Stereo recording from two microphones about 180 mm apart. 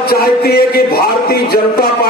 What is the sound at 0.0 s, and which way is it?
Speech, 60° left (ahead or behind).